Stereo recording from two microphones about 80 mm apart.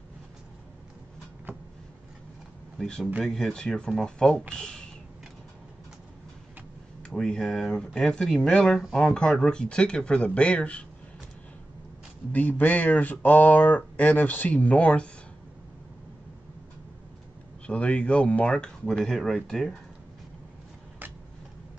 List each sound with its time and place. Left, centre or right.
2.8 s speech: centre
7.1 s speech: centre
12.3 s speech: centre
17.6 s speech: centre